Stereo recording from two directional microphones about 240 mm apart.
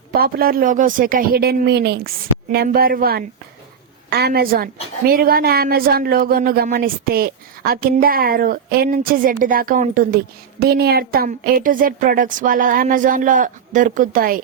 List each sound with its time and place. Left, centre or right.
0.1 s a woman's voice: right